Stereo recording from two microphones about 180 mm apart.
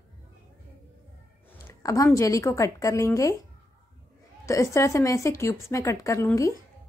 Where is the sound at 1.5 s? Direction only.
15° left (ahead or behind).